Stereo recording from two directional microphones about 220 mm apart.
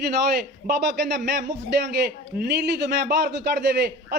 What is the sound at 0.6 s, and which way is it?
Speech, 40° right (ahead or behind).